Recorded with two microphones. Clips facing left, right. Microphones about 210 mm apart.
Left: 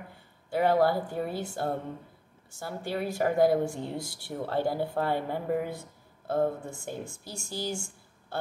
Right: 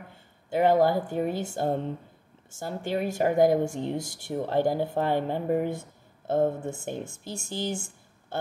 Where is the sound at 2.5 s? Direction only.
20° right (ahead or behind).